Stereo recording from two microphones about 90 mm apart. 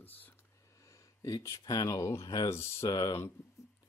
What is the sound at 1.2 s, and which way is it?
Speech, 40° left (ahead or behind).